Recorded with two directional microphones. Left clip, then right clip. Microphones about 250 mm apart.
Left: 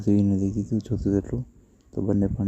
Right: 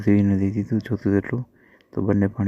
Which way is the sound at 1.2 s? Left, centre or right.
Right.